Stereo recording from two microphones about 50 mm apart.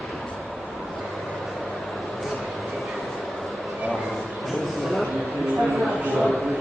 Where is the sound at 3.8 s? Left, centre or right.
Centre.